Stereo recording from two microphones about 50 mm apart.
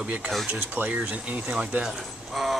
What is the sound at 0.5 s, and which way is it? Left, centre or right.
Speech, right.